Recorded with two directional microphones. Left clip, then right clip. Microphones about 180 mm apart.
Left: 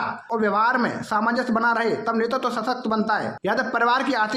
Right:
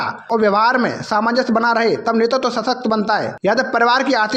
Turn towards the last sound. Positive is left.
turn(degrees=-30)  # may be behind; listen again after turning